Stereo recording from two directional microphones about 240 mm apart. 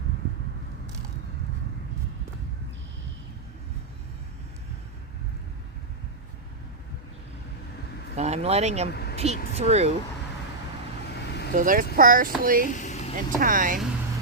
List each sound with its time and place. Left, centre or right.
8.1 s speech: right
8.9 s speech: left
9.1 s speech: right
11.5 s speech: right
12.7 s vehicle: left
13.1 s speech: right